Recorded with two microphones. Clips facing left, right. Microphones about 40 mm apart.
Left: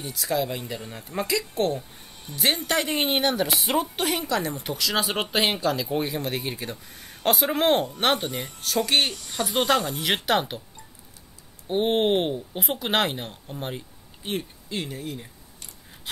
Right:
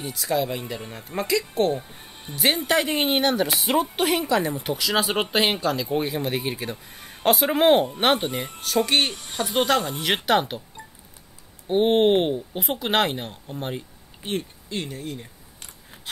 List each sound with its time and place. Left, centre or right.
0.0 s speech: centre
1.8 s music: right
2.3 s speech: centre
9.1 s a sound: right
9.4 s speech: centre
11.6 s speech: centre